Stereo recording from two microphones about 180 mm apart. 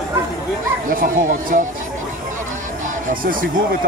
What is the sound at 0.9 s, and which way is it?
Speech, 50° right (ahead or behind).